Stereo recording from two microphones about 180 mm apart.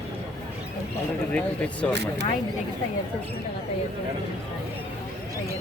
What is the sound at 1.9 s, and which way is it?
Speech, 70° right (ahead or behind).